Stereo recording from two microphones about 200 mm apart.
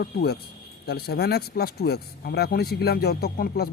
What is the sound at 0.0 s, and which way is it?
Speech, 55° left (ahead or behind).